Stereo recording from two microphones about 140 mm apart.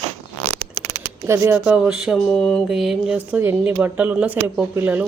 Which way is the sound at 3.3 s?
15° right (ahead or behind).